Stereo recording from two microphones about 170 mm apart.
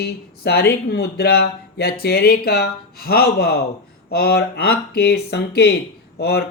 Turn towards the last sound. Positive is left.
turn(degrees=70)  # may be behind; listen again after turning